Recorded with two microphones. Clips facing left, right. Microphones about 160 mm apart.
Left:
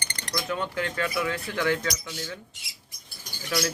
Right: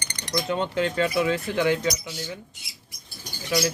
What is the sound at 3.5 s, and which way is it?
Speech, 15° right (ahead or behind).